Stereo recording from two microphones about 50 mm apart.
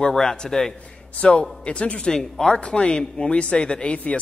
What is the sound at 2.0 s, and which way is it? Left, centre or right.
A man's voice, centre.